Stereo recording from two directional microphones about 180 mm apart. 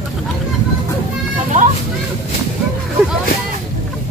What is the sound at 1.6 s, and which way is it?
Children playing, 45° right (ahead or behind).